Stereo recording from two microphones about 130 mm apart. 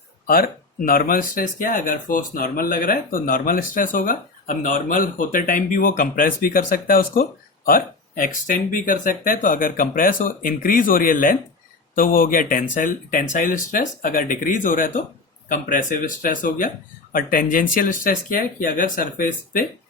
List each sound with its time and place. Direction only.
0.3 s speech: 90° left